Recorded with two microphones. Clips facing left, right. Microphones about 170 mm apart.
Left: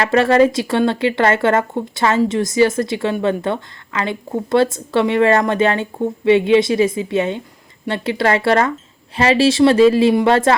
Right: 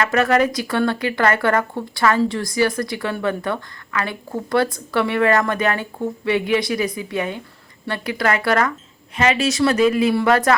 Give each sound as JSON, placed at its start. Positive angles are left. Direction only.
{"t": 0.0, "sound": "speech", "side_deg": 30}